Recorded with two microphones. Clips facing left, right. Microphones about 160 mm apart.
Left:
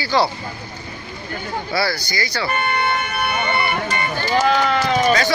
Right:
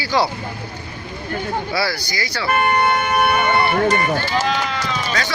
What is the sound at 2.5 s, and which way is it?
Speech, 50° right (ahead or behind).